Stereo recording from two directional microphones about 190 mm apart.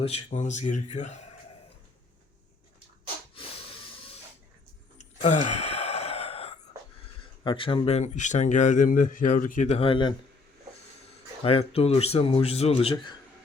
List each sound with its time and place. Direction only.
0.0 s speech: 35° left (ahead or behind)
3.3 s a sound: 30° left (ahead or behind)
5.2 s gasp: 35° left (ahead or behind)
7.4 s speech: 25° left (ahead or behind)
11.4 s speech: 30° left (ahead or behind)